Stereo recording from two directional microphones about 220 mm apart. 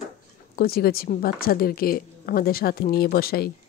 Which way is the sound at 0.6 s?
45° left (ahead or behind).